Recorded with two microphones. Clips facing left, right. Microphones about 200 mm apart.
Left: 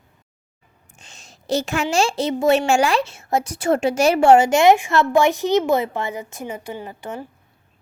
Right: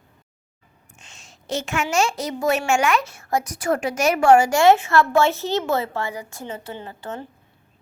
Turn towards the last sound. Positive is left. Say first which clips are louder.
# left 2 dB
turn(degrees=10)  # may be behind; listen again after turning